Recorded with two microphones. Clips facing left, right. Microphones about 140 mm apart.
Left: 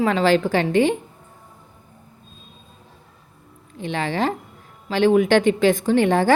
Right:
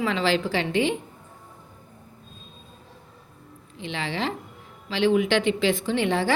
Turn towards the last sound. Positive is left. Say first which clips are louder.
# left 6 dB
turn(degrees=45)  # may be behind; listen again after turning